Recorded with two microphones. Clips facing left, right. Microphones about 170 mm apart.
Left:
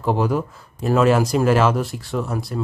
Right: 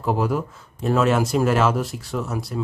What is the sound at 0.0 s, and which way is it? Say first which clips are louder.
Speech: left 2 dB; centre (ahead or behind).